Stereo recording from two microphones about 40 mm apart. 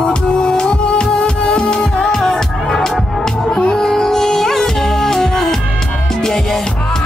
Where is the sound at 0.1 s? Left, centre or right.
Left.